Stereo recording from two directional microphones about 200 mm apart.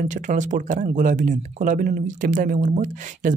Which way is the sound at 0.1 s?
40° right (ahead or behind).